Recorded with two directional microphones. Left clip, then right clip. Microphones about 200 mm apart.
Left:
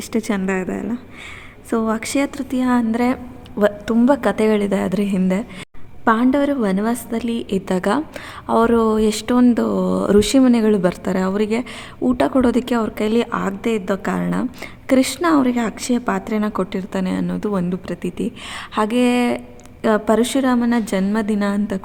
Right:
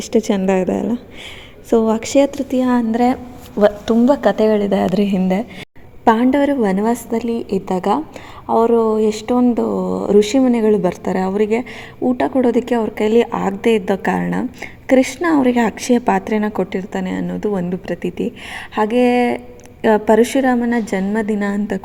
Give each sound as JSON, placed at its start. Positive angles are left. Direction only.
{"t": 0.1, "sound": "a woman's voice", "side_deg": -5}
{"t": 16.9, "sound": "a woman's voice", "side_deg": 10}